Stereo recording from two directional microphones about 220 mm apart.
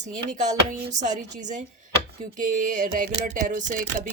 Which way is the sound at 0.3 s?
35° right (ahead or behind).